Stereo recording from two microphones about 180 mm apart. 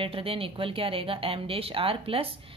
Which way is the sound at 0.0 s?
30° right (ahead or behind).